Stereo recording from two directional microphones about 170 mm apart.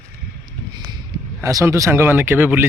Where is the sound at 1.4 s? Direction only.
20° right (ahead or behind).